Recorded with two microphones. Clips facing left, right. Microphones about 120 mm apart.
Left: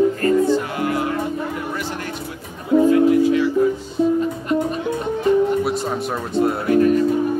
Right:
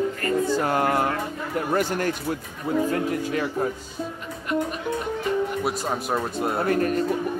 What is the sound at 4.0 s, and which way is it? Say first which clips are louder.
Speech: left 15 dB; 20° left (ahead or behind).